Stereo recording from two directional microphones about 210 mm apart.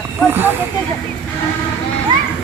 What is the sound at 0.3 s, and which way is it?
Speech, 10° right (ahead or behind).